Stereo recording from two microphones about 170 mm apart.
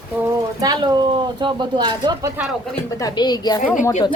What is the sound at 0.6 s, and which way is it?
Speech, 25° right (ahead or behind).